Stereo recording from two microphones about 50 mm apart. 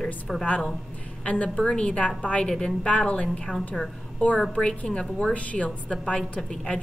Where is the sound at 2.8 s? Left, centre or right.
Left.